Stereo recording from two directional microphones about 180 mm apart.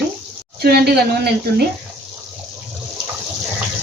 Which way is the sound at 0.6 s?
60° right (ahead or behind).